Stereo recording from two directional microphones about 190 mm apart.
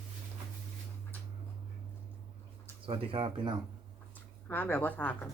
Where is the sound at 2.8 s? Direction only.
30° right (ahead or behind).